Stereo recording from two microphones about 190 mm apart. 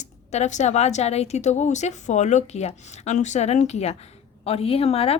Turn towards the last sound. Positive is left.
turn(degrees=30)  # may be behind; listen again after turning